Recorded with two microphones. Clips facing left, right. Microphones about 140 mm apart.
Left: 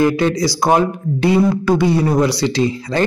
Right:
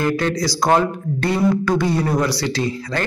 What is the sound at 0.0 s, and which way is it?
Speech, 10° left (ahead or behind).